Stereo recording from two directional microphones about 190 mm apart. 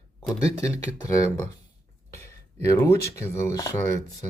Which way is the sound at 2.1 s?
15° left (ahead or behind).